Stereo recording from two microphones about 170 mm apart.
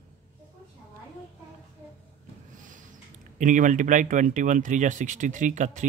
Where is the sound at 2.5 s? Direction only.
50° right (ahead or behind).